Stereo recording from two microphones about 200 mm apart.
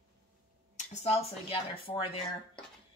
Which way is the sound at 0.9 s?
30° left (ahead or behind).